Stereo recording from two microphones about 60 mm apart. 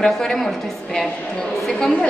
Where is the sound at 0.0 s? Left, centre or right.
Centre.